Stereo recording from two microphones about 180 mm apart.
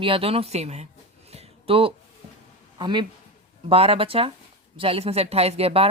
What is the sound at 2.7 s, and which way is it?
Speech, 25° right (ahead or behind).